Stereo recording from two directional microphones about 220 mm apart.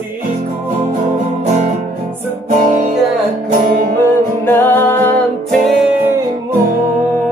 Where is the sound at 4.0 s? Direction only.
10° left (ahead or behind).